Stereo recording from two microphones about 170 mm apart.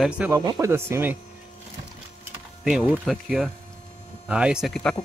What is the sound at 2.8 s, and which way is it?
Speech, 10° left (ahead or behind).